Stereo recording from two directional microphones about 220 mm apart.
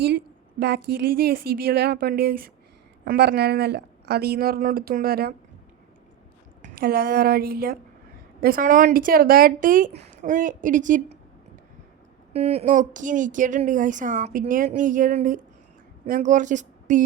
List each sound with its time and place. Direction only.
0.9 s speech: 45° right (ahead or behind)
6.7 s speech: 45° right (ahead or behind)
12.3 s speech: 30° right (ahead or behind)